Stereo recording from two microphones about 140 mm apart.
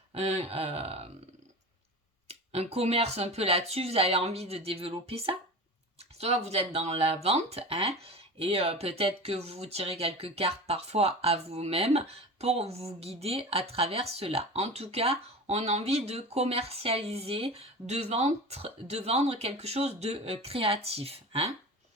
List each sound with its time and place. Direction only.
0.1 s speech: 50° right (ahead or behind)
2.2 s speech: 50° right (ahead or behind)